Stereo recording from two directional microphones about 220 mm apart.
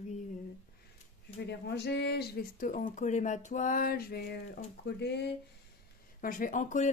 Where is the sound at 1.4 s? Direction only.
50° left (ahead or behind).